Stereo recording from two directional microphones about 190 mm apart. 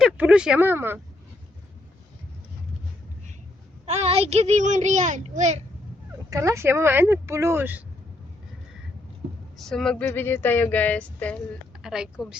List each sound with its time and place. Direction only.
0.0 s speech: 5° right (ahead or behind)
3.8 s a child's voice: 35° right (ahead or behind)
6.3 s speech: 15° right (ahead or behind)
9.6 s speech: 5° left (ahead or behind)